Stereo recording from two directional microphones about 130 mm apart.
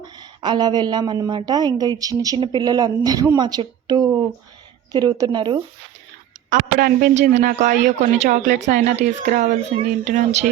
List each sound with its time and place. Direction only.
0.0 s a woman's voice: 35° right (ahead or behind)
7.2 s speech: 75° right (ahead or behind)